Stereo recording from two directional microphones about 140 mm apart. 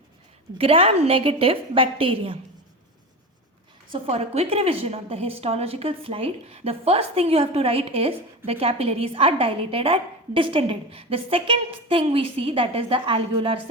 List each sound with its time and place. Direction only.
0.6 s a woman's voice: 40° right (ahead or behind)
3.9 s a woman's voice: 45° right (ahead or behind)